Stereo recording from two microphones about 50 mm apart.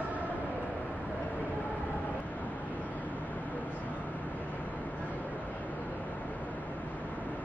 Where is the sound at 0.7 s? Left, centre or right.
Left.